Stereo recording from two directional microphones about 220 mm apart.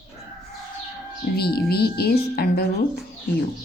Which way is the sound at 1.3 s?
45° left (ahead or behind).